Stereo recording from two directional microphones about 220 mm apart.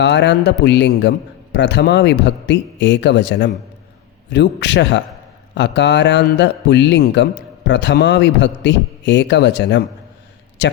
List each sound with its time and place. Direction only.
0.0 s a man's voice: 50° left (ahead or behind)